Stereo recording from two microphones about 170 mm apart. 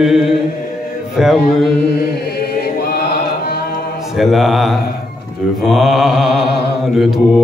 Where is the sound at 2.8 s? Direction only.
65° left (ahead or behind).